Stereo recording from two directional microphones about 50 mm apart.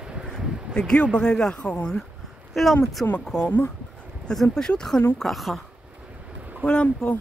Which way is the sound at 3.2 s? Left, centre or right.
Centre.